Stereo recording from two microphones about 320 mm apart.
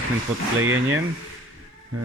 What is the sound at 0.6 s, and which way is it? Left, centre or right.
Speech, right.